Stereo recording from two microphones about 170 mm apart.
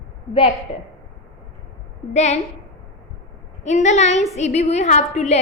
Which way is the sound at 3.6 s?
45° left (ahead or behind).